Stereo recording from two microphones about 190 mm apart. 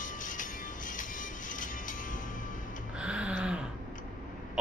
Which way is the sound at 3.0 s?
5° right (ahead or behind).